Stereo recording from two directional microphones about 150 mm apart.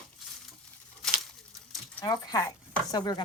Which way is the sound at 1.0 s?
Centre (ahead or behind).